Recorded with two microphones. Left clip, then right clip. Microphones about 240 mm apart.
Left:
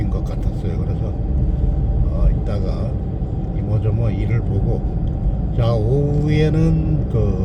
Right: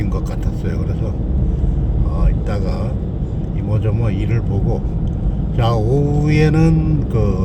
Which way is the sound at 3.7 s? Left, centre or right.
Centre.